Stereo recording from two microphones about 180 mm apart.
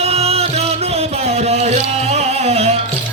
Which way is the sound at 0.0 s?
35° right (ahead or behind).